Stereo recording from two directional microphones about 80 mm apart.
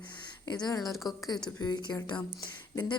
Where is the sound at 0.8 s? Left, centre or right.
Centre.